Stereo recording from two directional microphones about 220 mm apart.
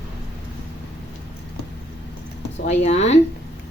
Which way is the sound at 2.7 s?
30° left (ahead or behind).